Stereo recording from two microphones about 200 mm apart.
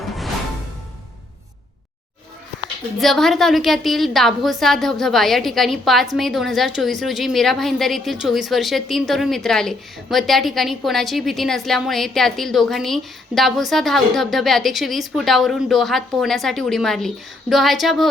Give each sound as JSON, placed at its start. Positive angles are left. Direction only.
{"t": 3.0, "sound": "a woman's voice", "side_deg": 0}